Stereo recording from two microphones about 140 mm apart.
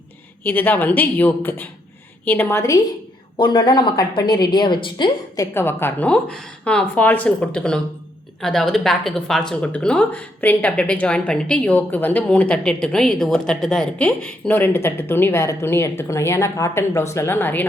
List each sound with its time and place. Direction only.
0.4 s speech: 15° left (ahead or behind)
3.3 s a woman's voice: 35° left (ahead or behind)
5.5 s speech: 15° left (ahead or behind)